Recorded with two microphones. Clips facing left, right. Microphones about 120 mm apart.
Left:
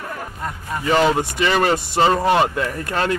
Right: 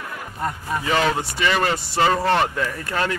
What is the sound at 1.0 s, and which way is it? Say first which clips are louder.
Speech: left 3 dB; 25° left (ahead or behind).